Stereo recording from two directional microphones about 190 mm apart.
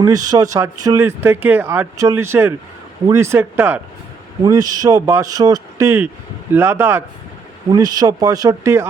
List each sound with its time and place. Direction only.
0.0 s speech: 20° right (ahead or behind)